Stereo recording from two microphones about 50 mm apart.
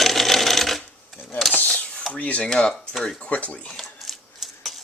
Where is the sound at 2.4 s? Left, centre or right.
Centre.